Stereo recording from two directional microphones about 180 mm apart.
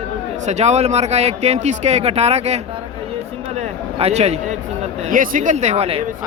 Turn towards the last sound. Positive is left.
turn(degrees=-35)  # may be behind; listen again after turning